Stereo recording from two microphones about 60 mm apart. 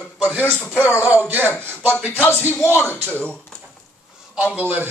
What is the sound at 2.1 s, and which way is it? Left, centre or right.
Music, left.